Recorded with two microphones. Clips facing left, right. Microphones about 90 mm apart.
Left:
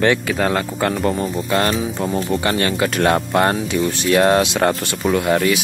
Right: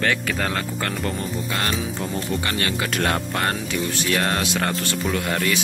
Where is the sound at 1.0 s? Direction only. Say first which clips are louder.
Left 7 dB; 35° left (ahead or behind).